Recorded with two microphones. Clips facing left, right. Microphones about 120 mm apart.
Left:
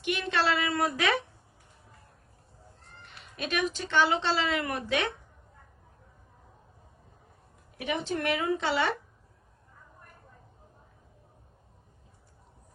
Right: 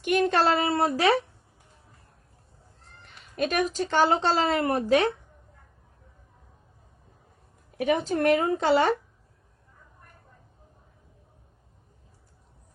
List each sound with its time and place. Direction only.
0.0 s speech: 45° right (ahead or behind)
3.3 s speech: 45° right (ahead or behind)
7.8 s speech: 40° right (ahead or behind)